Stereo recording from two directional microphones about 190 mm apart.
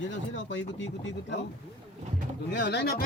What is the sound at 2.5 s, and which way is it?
Speech, 65° left (ahead or behind).